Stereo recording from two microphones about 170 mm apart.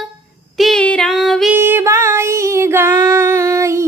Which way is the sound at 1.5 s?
10° right (ahead or behind).